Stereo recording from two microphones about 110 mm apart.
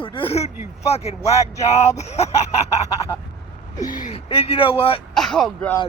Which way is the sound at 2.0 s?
85° left.